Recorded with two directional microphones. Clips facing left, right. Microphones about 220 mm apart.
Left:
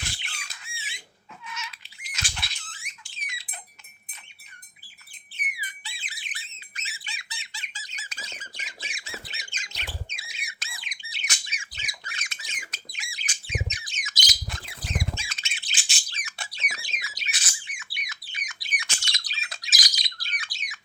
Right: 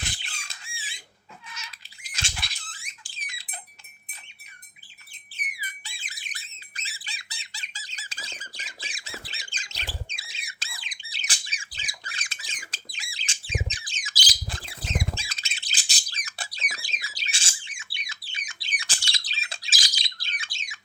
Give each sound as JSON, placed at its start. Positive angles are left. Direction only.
{"t": 0.4, "sound": "squawk", "side_deg": -30}
{"t": 1.5, "sound": "cat", "side_deg": -35}
{"t": 2.3, "sound": "rodents", "side_deg": 0}
{"t": 2.8, "sound": "a sound", "side_deg": -35}
{"t": 5.4, "sound": "squawk", "side_deg": -45}
{"t": 10.3, "sound": "a sound", "side_deg": -30}
{"t": 15.2, "sound": "bird", "side_deg": -35}